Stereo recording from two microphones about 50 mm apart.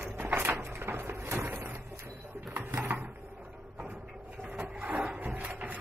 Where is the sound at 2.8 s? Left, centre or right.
Right.